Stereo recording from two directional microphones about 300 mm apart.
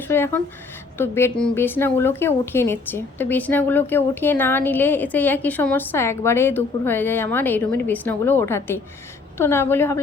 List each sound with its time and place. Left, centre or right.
0.1 s a woman's voice: centre